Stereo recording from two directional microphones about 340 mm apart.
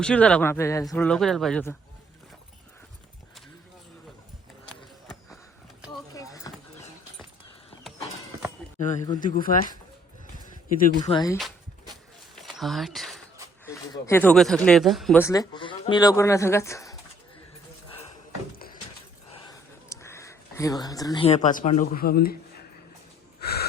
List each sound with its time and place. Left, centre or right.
0.0 s speech: centre
6.1 s a sound: centre
8.8 s speech: left
10.8 s speech: left
12.4 s a sound: centre
13.7 s speech: centre
19.9 s speech: centre; by 22.4 s left
23.4 s wheeze: left